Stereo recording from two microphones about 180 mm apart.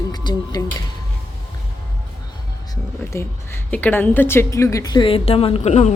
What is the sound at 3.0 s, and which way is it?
A woman's voice, 15° left (ahead or behind).